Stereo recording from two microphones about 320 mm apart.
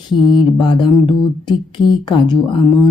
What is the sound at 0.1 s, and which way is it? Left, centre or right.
Speech, centre.